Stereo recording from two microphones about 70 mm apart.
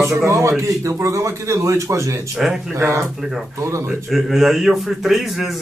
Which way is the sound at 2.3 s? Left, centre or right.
Centre.